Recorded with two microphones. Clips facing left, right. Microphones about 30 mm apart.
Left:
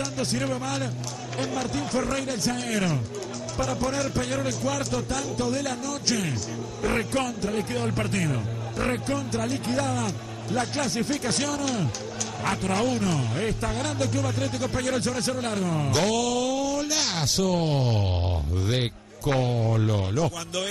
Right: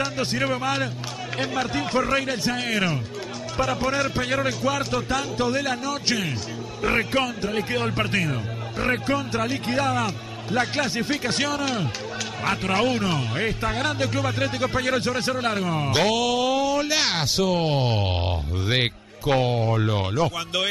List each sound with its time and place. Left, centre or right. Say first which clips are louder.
0.0 s a man's voice: right 3 dB; right